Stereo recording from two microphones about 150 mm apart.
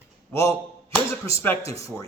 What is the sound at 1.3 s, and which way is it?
Speech, 15° left (ahead or behind).